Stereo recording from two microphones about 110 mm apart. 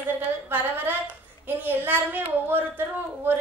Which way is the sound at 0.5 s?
20° right (ahead or behind).